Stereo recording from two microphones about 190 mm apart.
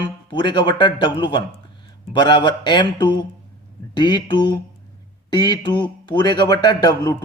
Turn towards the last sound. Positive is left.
turn(degrees=20)  # may be behind; listen again after turning